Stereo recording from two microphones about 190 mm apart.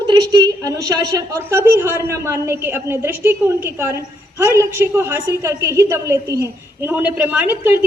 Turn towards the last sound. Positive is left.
turn(degrees=-10)  # may be behind; listen again after turning